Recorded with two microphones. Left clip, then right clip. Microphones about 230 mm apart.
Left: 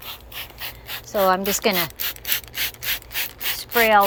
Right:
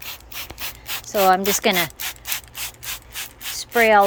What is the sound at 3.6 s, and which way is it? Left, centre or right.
Rub, centre.